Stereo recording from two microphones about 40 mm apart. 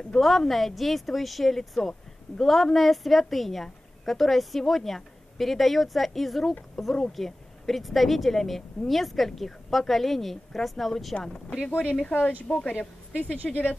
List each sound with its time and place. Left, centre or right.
0.2 s speech: centre
11.1 s speech: centre
11.7 s speech: left